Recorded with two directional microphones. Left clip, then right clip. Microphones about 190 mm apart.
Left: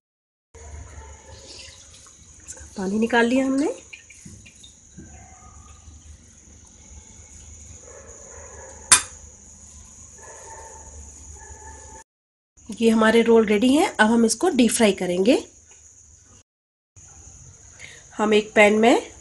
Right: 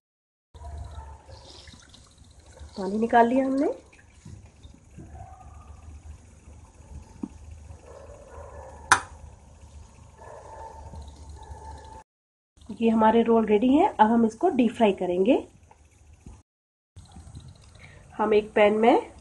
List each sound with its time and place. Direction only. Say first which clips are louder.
2.8 s a woman's voice: even; 45° left (ahead or behind)
12.7 s speech: left 3 dB; 40° left (ahead or behind)
18.1 s a woman's voice: left 4 dB; 50° left (ahead or behind)